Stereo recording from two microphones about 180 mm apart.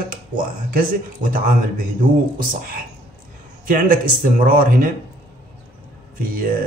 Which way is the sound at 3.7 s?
50° right (ahead or behind).